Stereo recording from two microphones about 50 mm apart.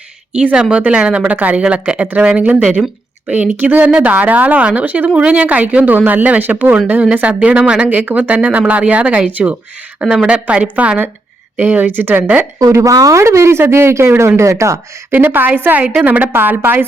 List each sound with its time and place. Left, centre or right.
0.5 s speech: centre
7.9 s speech: right
12.7 s speech: right
15.1 s a woman's voice: right